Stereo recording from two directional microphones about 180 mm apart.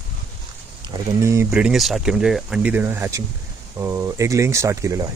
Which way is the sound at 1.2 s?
15° right (ahead or behind).